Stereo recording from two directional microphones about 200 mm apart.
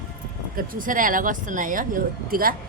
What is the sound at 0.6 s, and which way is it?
Speech, 45° right (ahead or behind).